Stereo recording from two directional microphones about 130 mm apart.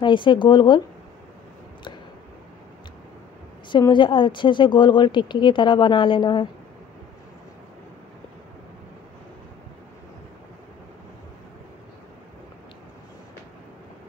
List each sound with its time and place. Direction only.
0.0 s speech: 40° left (ahead or behind)
3.9 s speech: 40° left (ahead or behind)